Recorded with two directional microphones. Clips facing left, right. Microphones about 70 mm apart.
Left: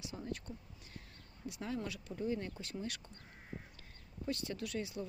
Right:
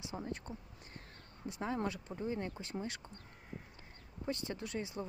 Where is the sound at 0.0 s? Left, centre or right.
Right.